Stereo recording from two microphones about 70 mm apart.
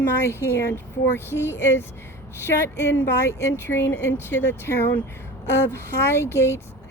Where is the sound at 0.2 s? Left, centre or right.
Left.